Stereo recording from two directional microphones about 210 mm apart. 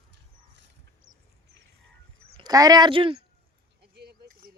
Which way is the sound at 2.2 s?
25° right (ahead or behind).